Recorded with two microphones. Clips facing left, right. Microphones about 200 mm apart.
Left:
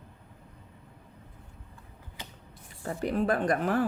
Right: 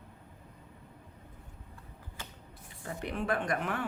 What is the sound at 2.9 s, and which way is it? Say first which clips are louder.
Speech: left 6 dB; 35° left (ahead or behind).